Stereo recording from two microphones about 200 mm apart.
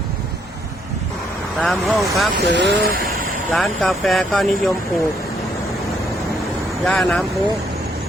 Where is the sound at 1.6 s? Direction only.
Centre (ahead or behind).